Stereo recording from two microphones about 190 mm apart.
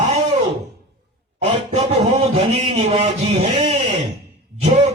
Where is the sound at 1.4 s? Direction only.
30° right (ahead or behind).